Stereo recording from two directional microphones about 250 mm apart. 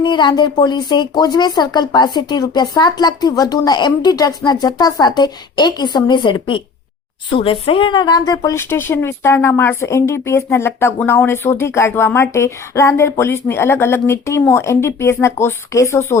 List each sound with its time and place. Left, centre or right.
0.0 s speech: centre